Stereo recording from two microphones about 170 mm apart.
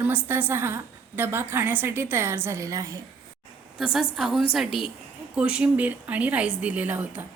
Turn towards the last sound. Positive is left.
turn(degrees=-10)  # may be behind; listen again after turning